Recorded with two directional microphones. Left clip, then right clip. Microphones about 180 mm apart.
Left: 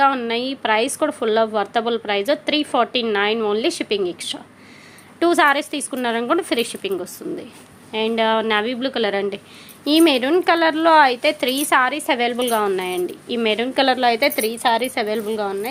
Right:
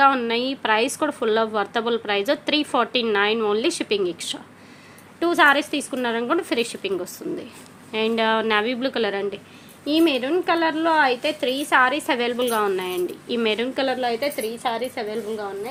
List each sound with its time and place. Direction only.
0.0 s a woman's voice: 5° left (ahead or behind)
5.2 s a woman's voice: 25° left (ahead or behind)
9.8 s a woman's voice: 30° left (ahead or behind); by 13.7 s 10° left (ahead or behind)
13.7 s a woman's voice: 25° left (ahead or behind)